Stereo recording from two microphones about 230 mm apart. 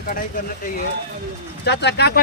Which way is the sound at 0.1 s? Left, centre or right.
Left.